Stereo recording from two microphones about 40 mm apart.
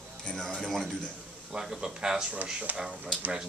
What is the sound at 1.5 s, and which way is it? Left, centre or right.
Speech, centre.